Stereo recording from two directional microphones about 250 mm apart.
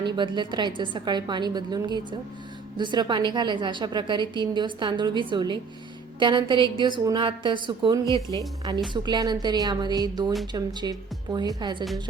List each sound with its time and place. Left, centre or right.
0.0 s a woman's voice: centre